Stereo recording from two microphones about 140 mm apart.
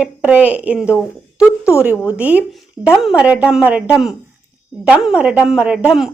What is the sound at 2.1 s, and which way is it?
Speech, 10° right (ahead or behind).